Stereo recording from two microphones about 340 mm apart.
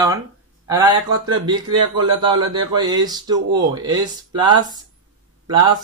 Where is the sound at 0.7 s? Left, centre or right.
Centre.